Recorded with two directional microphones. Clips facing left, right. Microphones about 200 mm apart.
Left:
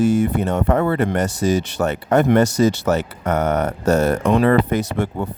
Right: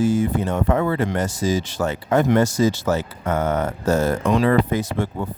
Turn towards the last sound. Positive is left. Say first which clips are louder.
# left 2 dB
turn(degrees=65)  # may be behind; listen again after turning